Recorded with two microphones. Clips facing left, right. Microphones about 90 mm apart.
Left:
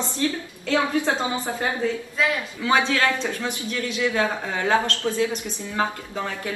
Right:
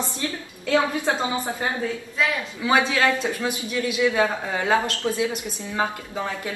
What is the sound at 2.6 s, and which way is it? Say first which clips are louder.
A man's voice: right 1 dB; 15° right (ahead or behind).